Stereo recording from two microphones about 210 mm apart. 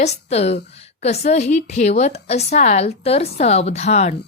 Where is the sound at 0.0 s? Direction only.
30° left (ahead or behind).